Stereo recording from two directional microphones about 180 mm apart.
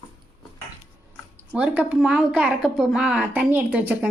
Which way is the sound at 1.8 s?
5° right (ahead or behind).